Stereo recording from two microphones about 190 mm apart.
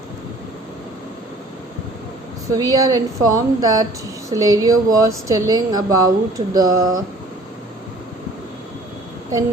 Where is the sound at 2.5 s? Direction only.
20° right (ahead or behind).